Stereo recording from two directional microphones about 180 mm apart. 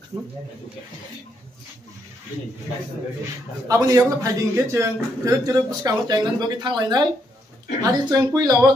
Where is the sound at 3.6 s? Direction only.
20° right (ahead or behind).